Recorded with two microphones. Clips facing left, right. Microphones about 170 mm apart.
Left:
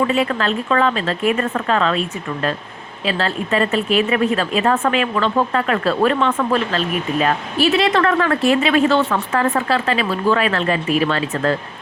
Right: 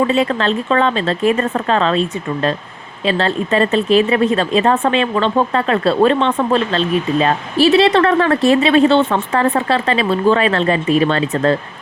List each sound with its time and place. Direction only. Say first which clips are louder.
0.1 s speech: right 3 dB; 35° right (ahead or behind)